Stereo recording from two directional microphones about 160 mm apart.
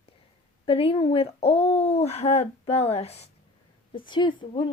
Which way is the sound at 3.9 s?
30° left (ahead or behind).